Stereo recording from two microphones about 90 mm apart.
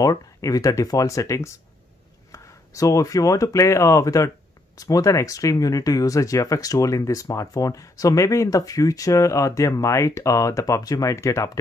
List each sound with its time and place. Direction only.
0.0 s speech: 40° left (ahead or behind)